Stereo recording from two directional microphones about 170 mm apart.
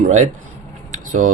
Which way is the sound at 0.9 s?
50° right (ahead or behind).